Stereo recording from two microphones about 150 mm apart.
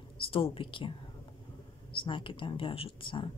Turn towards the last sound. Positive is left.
turn(degrees=35)  # may be behind; listen again after turning